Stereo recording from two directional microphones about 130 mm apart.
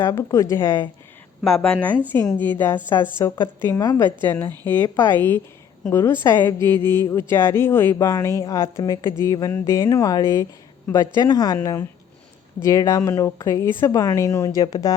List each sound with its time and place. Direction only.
0.0 s speech: 25° left (ahead or behind)
1.5 s speech: 5° left (ahead or behind); by 14.9 s 25° left (ahead or behind)